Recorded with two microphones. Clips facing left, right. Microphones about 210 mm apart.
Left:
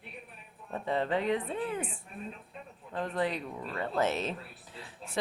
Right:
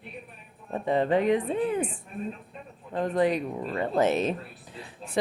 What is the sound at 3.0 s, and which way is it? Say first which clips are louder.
A woman's voice: right 8 dB; 15° right (ahead or behind).